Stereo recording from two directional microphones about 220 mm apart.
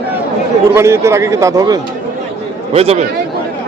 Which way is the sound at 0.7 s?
10° right (ahead or behind).